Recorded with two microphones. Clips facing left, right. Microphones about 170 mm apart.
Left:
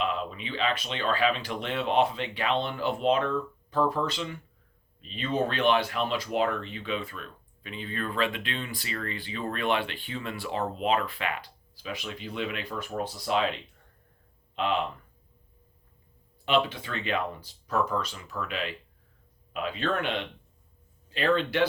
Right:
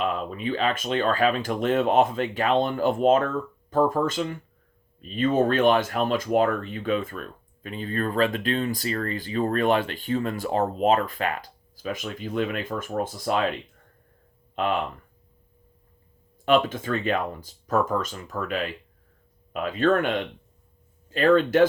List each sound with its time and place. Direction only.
0.0 s speech: 45° right (ahead or behind)
14.5 s speech: 45° right (ahead or behind)
16.5 s speech: 45° right (ahead or behind)